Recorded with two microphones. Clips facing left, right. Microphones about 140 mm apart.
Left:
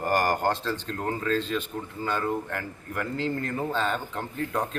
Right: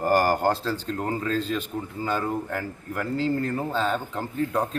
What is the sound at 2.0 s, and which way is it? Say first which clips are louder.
Speech: right 1 dB; 10° right (ahead or behind).